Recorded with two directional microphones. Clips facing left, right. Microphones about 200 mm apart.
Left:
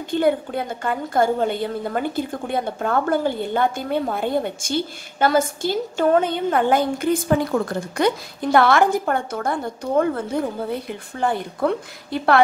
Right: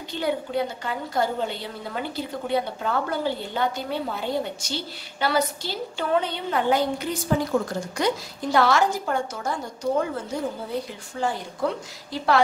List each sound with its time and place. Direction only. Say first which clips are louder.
0.1 s a woman's voice: left 6 dB; 50° left (ahead or behind)